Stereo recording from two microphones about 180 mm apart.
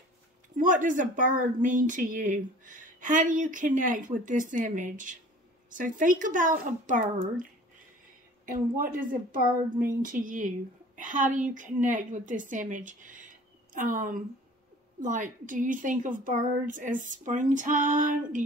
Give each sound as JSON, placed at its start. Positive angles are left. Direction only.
{"t": 0.6, "sound": "speech", "side_deg": -45}
{"t": 8.5, "sound": "a woman's voice", "side_deg": -50}